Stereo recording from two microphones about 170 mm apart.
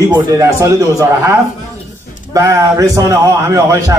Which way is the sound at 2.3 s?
20° right (ahead or behind).